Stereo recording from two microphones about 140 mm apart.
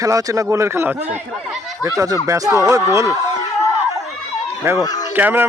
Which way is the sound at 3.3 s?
25° left (ahead or behind).